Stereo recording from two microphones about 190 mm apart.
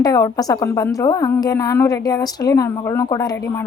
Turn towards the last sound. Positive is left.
turn(degrees=15)  # may be behind; listen again after turning